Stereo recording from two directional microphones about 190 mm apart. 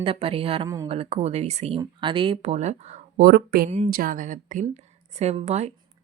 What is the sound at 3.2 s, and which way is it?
A woman's voice, 55° right (ahead or behind).